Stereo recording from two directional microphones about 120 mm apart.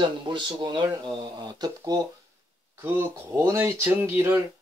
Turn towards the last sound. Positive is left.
turn(degrees=-20)  # may be behind; listen again after turning